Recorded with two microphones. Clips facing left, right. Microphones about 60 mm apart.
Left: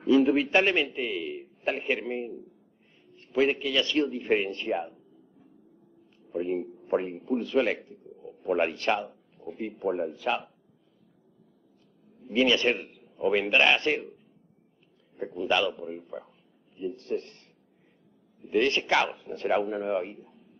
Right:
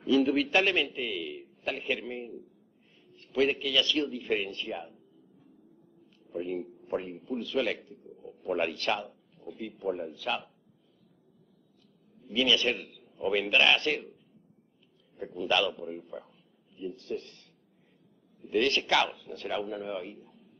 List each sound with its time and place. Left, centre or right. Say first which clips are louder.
0.0 s a man's voice: left 4 dB; left
3.2 s a man's voice: left 2 dB; left
6.5 s a sound: left 6 dB; left
7.0 s a man's voice: left 6 dB; left
8.2 s a sound: left 2 dB; centre
8.5 s a man's voice: left 3 dB; left
9.4 s a man's voice: left 5 dB; left
12.2 s a man's voice: left 3 dB; left
15.4 s a man's voice: left 2 dB; centre
15.7 s a man's voice: left 2 dB; centre
16.7 s speech: left 4 dB; left
18.4 s a man's voice: left 2 dB; left
19.6 s a man's voice: left 6 dB; left
20.0 s a man's voice: left 7 dB; left